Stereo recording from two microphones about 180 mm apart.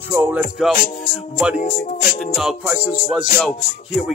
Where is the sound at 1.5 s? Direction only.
45° left (ahead or behind).